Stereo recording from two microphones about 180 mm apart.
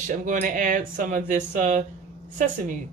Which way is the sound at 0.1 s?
45° right (ahead or behind).